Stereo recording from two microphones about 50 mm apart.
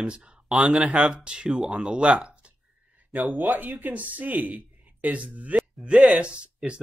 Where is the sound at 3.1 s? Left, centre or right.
Right.